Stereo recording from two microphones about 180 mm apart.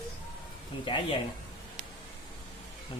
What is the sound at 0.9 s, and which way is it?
Speech, 30° left (ahead or behind).